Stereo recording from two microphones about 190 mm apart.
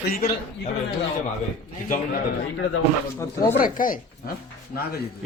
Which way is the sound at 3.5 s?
45° left (ahead or behind).